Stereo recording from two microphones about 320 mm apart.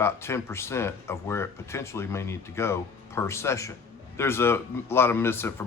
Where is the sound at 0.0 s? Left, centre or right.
Centre.